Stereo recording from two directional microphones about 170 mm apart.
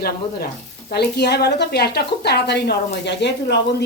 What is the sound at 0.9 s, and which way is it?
A woman's voice, 75° left (ahead or behind).